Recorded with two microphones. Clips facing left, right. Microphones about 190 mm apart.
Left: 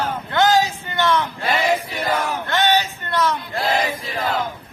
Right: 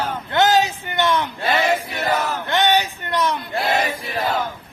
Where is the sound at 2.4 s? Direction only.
15° right (ahead or behind).